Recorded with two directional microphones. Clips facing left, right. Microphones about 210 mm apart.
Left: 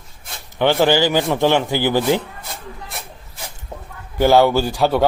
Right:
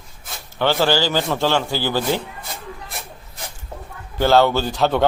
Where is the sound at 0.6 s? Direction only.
15° left (ahead or behind).